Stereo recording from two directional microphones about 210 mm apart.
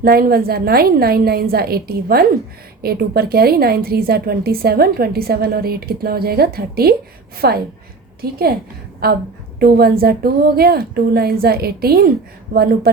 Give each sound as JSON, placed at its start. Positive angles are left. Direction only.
{"t": 0.0, "sound": "a woman's voice", "side_deg": -45}